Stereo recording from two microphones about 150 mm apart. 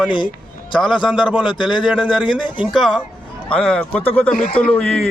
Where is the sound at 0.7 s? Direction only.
30° left (ahead or behind).